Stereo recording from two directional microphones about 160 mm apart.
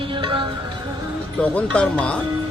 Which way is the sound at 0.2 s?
30° right (ahead or behind).